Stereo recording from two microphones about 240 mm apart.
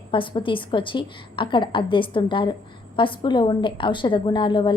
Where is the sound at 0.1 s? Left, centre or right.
Left.